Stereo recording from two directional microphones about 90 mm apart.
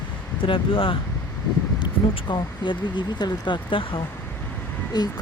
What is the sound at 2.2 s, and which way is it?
Speech, 60° left (ahead or behind).